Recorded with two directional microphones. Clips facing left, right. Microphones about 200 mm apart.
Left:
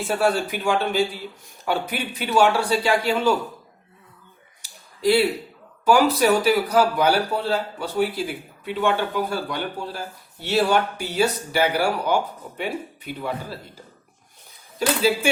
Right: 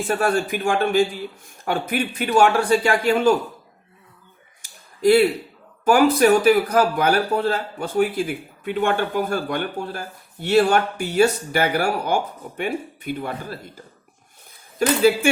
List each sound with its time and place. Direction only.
0.3 s speech: 50° right (ahead or behind)
4.6 s a sound: 50° right (ahead or behind)
5.8 s speech: 50° right (ahead or behind)
14.8 s speech: 50° right (ahead or behind)